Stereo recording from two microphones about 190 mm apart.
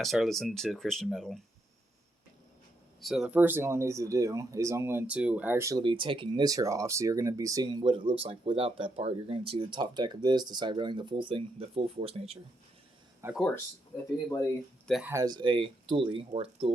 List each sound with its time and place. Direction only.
0.0 s speech: centre (ahead or behind)
3.0 s speech: centre (ahead or behind)
5.8 s speech: 25° right (ahead or behind)
13.2 s speech: 15° right (ahead or behind)
14.8 s speech: centre (ahead or behind)
15.1 s speech: 20° right (ahead or behind)